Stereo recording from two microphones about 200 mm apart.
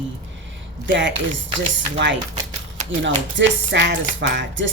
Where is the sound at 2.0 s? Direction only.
65° right (ahead or behind).